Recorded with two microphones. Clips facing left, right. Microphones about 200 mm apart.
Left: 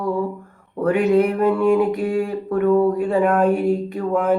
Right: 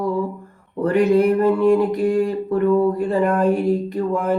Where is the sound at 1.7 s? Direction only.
Centre (ahead or behind).